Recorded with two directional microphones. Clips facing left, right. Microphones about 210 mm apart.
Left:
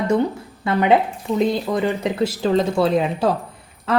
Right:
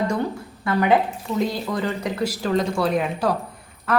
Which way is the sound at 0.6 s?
25° left (ahead or behind).